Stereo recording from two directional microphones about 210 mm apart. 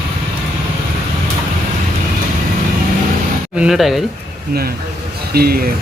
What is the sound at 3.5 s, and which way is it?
Speech, centre (ahead or behind).